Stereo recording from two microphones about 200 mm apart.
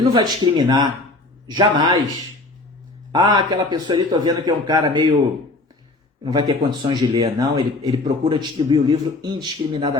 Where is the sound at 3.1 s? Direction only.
20° right (ahead or behind).